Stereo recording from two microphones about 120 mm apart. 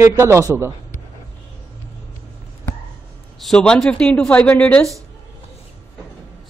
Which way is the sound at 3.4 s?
5° left (ahead or behind).